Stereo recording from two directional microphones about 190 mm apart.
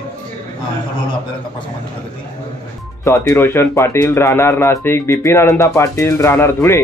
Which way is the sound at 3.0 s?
15° left (ahead or behind).